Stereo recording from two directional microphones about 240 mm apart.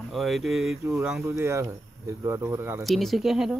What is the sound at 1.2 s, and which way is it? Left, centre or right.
Speech, centre.